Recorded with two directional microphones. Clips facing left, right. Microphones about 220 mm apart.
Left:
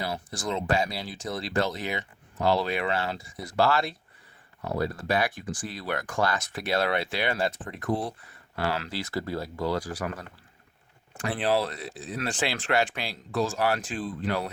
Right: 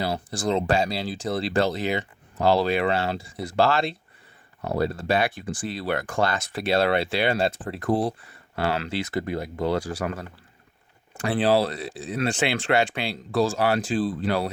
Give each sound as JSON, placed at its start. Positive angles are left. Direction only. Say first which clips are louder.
{"t": 0.0, "sound": "speech", "louder": "right 6 dB", "side_deg": -30}